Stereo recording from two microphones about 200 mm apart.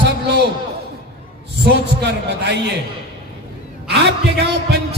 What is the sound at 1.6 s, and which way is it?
Speech, 55° right (ahead or behind).